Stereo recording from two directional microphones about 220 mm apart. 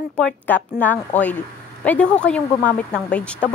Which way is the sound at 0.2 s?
5° left (ahead or behind).